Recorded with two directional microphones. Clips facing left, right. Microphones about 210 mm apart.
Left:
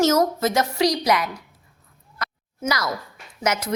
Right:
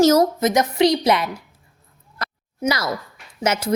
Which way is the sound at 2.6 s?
25° right (ahead or behind).